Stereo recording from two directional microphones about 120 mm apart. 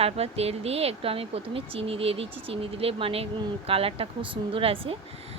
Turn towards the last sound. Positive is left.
turn(degrees=-50)  # may be behind; listen again after turning